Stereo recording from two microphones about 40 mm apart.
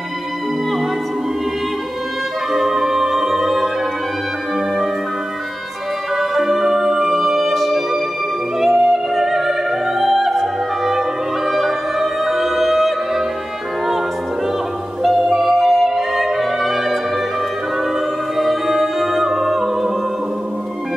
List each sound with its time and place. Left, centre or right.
2.5 s music: centre
6.1 s music: centre
15.0 s music: centre
18.4 s music: centre